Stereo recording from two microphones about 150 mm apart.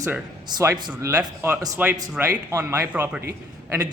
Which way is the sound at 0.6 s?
25° right (ahead or behind).